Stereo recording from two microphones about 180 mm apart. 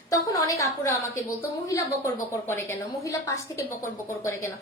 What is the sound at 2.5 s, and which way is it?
A woman's voice, 15° left (ahead or behind).